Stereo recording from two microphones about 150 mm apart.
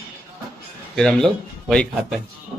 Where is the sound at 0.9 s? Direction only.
5° left (ahead or behind).